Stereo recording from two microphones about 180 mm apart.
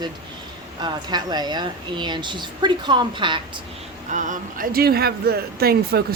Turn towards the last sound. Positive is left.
turn(degrees=-60)  # may be behind; listen again after turning